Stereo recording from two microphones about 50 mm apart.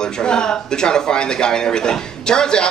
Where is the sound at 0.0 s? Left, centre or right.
Centre.